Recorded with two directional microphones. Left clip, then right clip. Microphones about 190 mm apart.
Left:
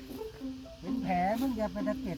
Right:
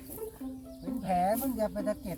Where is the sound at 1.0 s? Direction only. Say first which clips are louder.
Right 2 dB; 10° right (ahead or behind).